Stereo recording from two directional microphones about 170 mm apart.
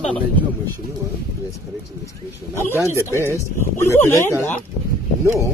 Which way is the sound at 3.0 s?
15° left (ahead or behind).